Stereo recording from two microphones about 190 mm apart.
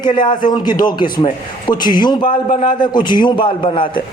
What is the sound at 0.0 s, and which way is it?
A man's voice, 25° left (ahead or behind).